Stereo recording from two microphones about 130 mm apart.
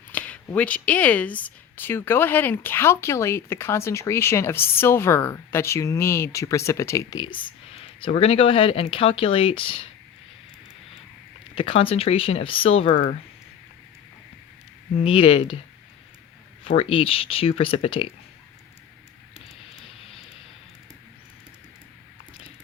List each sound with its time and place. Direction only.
0.1 s speech: 10° left (ahead or behind)
7.2 s speech: 40° left (ahead or behind)
11.5 s speech: 45° left (ahead or behind)
15.0 s speech: 45° left (ahead or behind)
16.6 s speech: 50° left (ahead or behind)